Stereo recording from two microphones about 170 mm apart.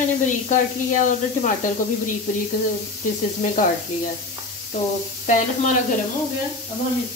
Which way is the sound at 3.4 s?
50° left (ahead or behind).